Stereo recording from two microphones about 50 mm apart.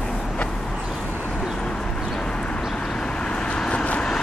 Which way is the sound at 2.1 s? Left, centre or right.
Centre.